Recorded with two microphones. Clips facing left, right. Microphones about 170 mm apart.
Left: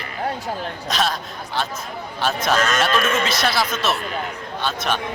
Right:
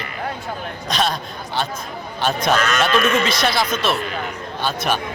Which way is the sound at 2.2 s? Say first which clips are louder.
Right 1 dB; centre (ahead or behind).